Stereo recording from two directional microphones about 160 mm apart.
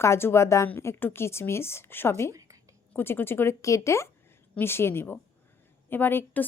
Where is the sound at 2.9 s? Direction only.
15° left (ahead or behind).